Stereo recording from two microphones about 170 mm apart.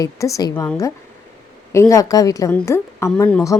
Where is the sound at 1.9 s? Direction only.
20° left (ahead or behind).